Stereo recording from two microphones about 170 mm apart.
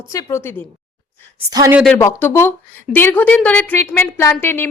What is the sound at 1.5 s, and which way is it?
Speech, 20° right (ahead or behind).